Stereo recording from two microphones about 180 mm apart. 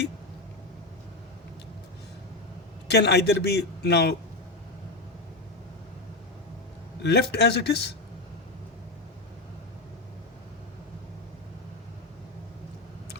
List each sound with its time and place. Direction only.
2.8 s a man's voice: 70° left (ahead or behind)
7.0 s speech: 65° left (ahead or behind)